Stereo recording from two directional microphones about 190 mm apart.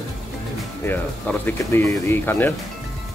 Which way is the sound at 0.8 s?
10° left (ahead or behind).